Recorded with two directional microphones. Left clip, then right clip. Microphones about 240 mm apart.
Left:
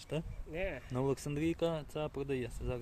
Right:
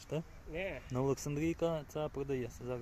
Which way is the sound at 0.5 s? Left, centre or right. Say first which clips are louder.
Left 1 dB; left.